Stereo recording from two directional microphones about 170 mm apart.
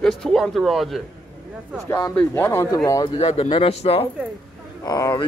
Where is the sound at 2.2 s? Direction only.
15° left (ahead or behind).